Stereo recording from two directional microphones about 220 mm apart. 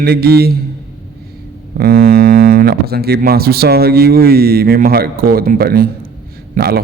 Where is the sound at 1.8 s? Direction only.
45° right (ahead or behind).